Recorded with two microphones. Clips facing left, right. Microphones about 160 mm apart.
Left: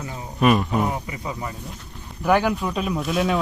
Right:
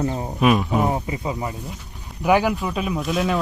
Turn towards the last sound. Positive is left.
turn(degrees=0)  # may be behind; listen again after turning